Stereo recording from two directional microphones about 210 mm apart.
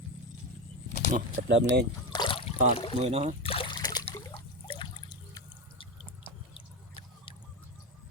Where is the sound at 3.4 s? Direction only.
25° left (ahead or behind).